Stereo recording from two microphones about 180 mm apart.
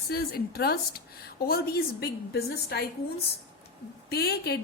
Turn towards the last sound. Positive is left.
turn(degrees=60)  # may be behind; listen again after turning